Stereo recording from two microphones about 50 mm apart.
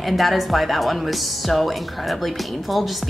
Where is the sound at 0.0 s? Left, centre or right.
Centre.